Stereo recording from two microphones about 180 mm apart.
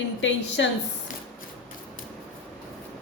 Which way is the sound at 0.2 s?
90° left.